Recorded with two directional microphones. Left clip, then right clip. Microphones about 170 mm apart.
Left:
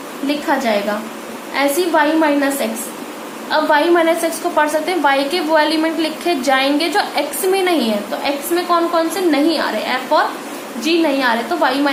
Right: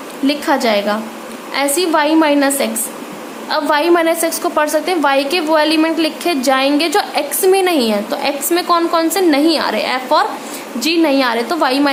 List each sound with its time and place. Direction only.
0.3 s a woman's voice: 45° right (ahead or behind)